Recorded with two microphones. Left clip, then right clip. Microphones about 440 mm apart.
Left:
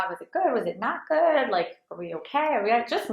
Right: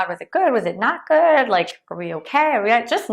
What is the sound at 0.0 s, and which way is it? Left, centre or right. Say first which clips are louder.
A woman's voice: right 7 dB; right.